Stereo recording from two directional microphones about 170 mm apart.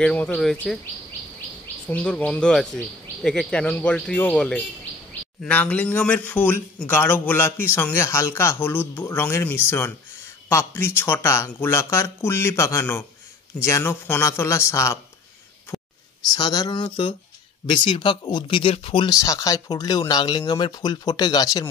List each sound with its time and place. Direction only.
0.0 s speech: 5° left (ahead or behind)
1.9 s speech: 10° left (ahead or behind)
15.7 s a sound: centre (ahead or behind)
16.3 s speech: 20° left (ahead or behind)